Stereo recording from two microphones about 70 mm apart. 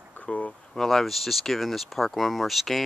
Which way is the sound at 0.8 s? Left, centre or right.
Centre.